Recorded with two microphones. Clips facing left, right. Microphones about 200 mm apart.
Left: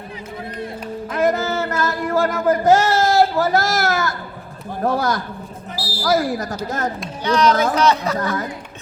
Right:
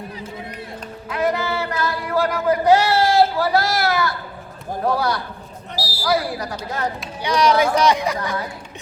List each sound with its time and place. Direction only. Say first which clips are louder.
1.1 s child singing: left 2 dB; 45° left (ahead or behind)
4.8 s a man's voice: left 1 dB; 45° left (ahead or behind)
7.3 s speech: even; 10° right (ahead or behind)